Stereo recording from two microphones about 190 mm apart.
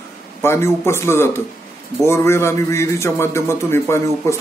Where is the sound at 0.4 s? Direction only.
15° left (ahead or behind).